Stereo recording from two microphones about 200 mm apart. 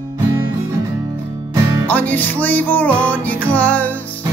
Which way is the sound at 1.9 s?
10° left (ahead or behind).